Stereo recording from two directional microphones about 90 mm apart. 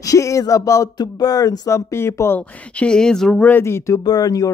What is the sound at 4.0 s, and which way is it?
Speech, 45° left (ahead or behind).